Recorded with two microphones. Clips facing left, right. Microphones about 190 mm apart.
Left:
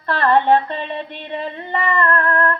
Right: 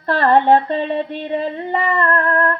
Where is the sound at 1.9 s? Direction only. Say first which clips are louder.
Left 1 dB; 30° right (ahead or behind).